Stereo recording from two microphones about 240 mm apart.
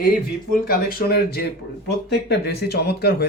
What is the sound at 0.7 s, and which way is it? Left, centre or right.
Speech, left.